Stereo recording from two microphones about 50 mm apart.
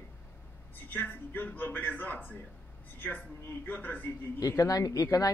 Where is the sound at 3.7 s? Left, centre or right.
Left.